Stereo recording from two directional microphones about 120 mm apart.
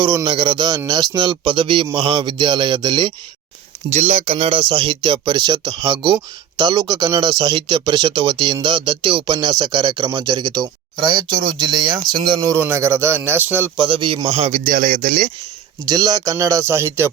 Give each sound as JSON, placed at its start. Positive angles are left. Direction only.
{"t": 0.0, "sound": "speech", "side_deg": -35}
{"t": 3.8, "sound": "speech", "side_deg": -70}
{"t": 12.5, "sound": "speech", "side_deg": -20}
{"t": 13.7, "sound": "a man's voice", "side_deg": -45}
{"t": 14.5, "sound": "speech", "side_deg": -90}
{"t": 15.9, "sound": "speech", "side_deg": -30}